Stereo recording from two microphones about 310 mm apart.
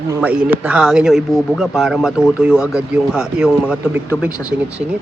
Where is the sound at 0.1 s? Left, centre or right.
Centre.